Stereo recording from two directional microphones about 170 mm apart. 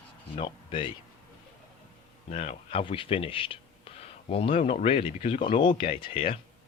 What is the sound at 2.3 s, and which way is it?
Speech, 40° left (ahead or behind).